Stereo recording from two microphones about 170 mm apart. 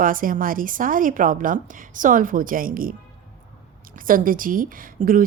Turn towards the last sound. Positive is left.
turn(degrees=-55)  # may be behind; listen again after turning